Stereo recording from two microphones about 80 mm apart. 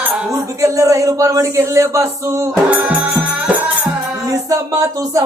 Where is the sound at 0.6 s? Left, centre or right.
Right.